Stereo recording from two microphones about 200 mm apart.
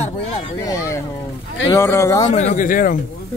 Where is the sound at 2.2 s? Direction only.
30° left (ahead or behind).